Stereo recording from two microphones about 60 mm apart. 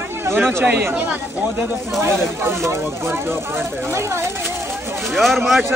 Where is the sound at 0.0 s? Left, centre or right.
Right.